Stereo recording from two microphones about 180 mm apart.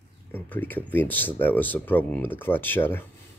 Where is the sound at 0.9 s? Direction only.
10° left (ahead or behind).